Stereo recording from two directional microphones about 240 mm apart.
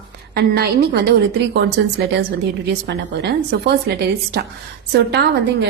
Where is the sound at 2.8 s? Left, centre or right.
Right.